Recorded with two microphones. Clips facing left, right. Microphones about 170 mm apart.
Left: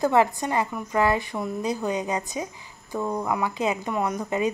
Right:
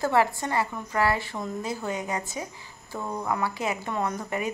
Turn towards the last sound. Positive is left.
turn(degrees=20)  # may be behind; listen again after turning